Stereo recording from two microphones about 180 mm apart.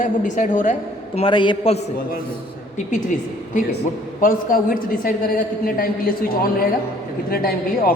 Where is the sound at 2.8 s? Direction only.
45° left (ahead or behind).